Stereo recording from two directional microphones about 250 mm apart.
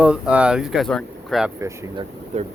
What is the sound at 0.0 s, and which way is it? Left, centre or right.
Speech, centre.